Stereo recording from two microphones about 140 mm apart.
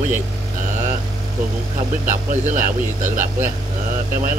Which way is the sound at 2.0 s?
65° right (ahead or behind).